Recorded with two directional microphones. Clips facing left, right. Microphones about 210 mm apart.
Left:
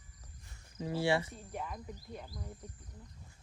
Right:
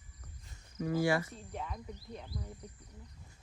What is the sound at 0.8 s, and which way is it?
Speech, 25° left (ahead or behind).